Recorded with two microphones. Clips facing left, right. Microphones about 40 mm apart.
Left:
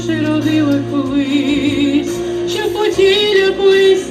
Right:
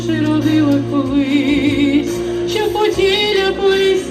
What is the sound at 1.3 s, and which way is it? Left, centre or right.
Music, left.